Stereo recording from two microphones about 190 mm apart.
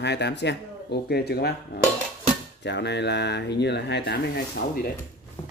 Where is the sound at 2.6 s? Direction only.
65° left (ahead or behind).